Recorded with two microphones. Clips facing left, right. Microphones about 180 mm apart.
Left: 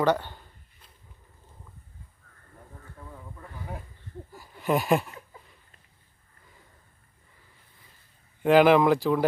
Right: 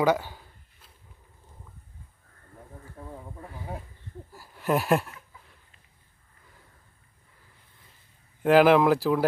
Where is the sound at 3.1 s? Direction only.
30° right (ahead or behind).